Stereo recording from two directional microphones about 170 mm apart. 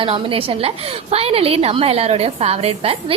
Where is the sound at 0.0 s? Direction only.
30° right (ahead or behind).